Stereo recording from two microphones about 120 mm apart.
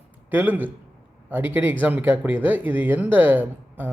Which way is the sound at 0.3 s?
15° right (ahead or behind).